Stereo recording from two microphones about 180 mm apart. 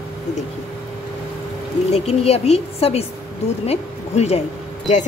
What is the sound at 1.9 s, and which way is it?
Speech, 35° left (ahead or behind).